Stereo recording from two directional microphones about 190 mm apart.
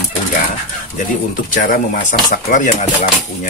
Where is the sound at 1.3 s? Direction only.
45° left (ahead or behind).